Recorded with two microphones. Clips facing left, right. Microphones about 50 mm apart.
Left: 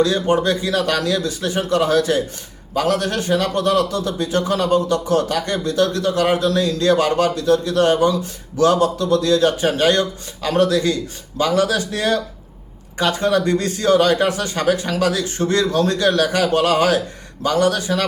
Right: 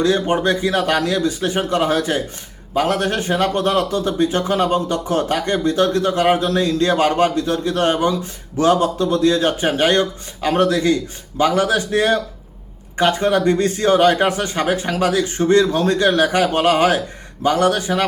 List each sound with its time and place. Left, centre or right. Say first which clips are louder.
0.0 s speech: even; right